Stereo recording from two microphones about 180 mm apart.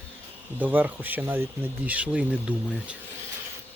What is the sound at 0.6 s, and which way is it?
Speech, 10° right (ahead or behind).